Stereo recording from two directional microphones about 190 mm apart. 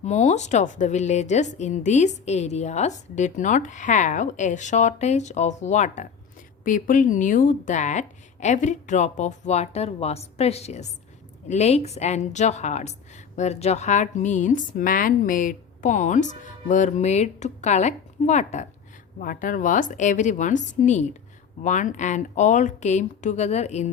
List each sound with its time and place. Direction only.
0.0 s a woman's voice: 40° left (ahead or behind)